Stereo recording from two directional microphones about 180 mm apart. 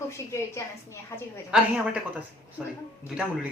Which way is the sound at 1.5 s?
5° right (ahead or behind).